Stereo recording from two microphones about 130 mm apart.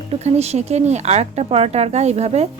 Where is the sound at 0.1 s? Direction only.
55° right (ahead or behind).